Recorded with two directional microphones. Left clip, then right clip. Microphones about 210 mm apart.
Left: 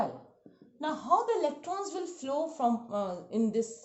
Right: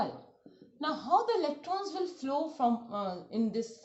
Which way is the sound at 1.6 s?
45° left (ahead or behind).